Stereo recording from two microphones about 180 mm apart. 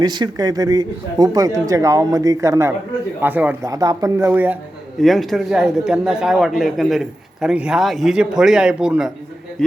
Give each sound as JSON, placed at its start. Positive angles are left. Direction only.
{"t": 0.0, "sound": "speech", "side_deg": -25}
{"t": 4.9, "sound": "a man's voice", "side_deg": 0}